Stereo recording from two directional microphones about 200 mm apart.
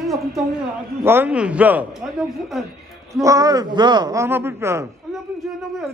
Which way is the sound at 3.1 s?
15° right (ahead or behind).